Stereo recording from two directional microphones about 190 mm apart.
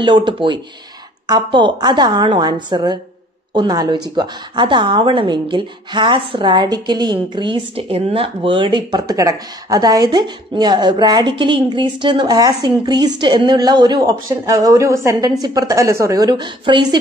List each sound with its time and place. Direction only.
0.0 s speech: 25° right (ahead or behind)